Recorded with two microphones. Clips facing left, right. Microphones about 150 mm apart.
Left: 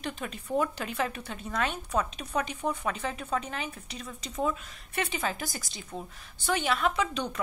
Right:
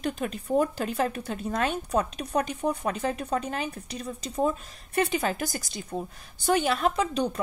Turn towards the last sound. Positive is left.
turn(degrees=-40)  # may be behind; listen again after turning